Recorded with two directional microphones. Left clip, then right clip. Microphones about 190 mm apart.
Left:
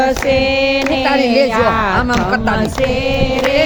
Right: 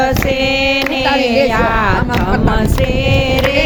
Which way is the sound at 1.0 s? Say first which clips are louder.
Even; 60° left (ahead or behind).